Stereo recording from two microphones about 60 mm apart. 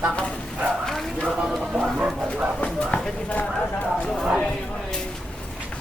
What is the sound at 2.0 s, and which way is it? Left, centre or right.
Speech, right.